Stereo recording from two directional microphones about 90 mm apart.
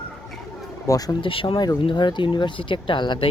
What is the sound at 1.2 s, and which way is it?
Speech, 80° left.